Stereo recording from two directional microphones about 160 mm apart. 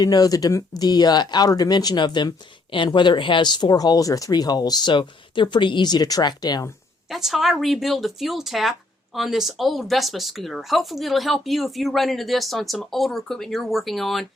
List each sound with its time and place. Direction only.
0.0 s speech: 25° left (ahead or behind)
7.1 s speech: centre (ahead or behind)